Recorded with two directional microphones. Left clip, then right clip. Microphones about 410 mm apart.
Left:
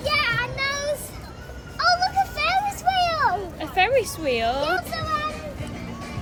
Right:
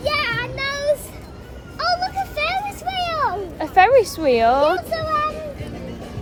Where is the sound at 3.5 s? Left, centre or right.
Centre.